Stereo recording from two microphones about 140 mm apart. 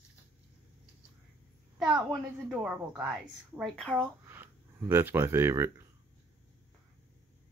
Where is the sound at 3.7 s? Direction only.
10° left (ahead or behind).